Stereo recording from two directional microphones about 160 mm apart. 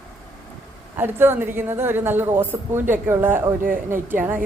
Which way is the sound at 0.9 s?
15° right (ahead or behind).